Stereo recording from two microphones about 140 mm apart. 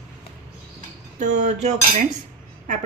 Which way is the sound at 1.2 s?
60° right (ahead or behind).